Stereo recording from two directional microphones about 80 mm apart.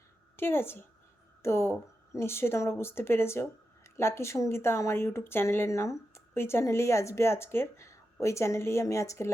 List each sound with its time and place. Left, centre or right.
0.3 s a woman's voice: left